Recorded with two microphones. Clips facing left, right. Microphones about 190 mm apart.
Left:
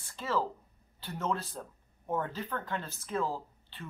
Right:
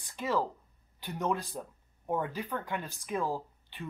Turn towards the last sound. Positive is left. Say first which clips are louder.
# right 3 dB
turn(degrees=-15)  # may be behind; listen again after turning